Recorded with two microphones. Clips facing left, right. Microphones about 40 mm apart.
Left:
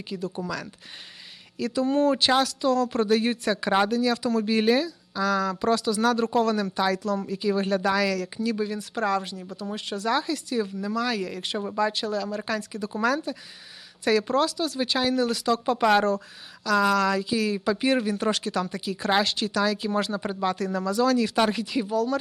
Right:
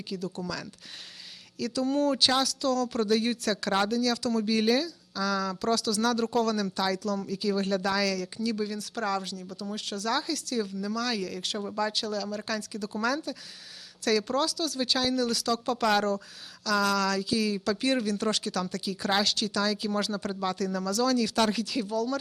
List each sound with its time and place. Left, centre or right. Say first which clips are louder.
0.3 s speech: left 4 dB; left